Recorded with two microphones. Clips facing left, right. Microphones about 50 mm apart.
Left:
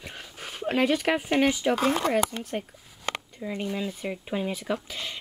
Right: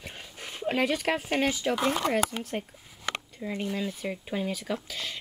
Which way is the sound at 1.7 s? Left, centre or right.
Left.